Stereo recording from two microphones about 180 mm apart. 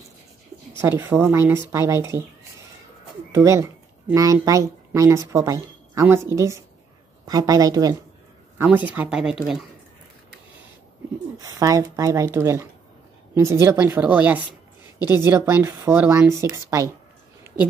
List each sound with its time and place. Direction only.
0.7 s speech: 15° right (ahead or behind)
3.3 s a woman's voice: 15° right (ahead or behind)
8.5 s speech: 10° right (ahead or behind)
11.3 s speech: 20° right (ahead or behind)